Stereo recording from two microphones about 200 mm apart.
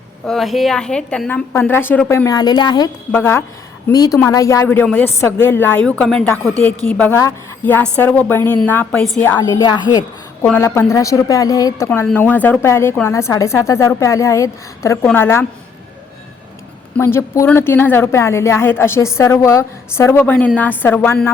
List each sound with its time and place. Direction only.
0.3 s a woman's voice: centre (ahead or behind); by 10.0 s 20° left (ahead or behind)
10.4 s a woman's voice: 10° left (ahead or behind)
17.0 s a woman's voice: 15° left (ahead or behind)